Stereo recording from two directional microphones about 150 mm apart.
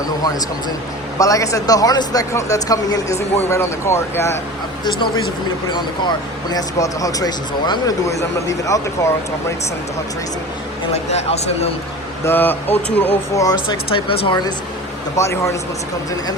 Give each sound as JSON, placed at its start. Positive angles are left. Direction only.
{"t": 1.2, "sound": "speech", "side_deg": 20}
{"t": 4.9, "sound": "speech", "side_deg": 30}
{"t": 10.9, "sound": "speech", "side_deg": 45}
{"t": 12.2, "sound": "speech", "side_deg": 15}
{"t": 13.4, "sound": "speech", "side_deg": 30}
{"t": 15.1, "sound": "speech", "side_deg": 20}